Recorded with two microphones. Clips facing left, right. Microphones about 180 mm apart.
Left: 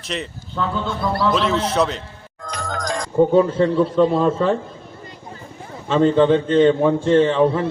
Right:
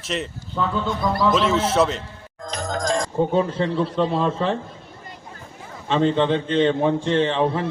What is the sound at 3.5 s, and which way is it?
A man's voice, 45° left (ahead or behind).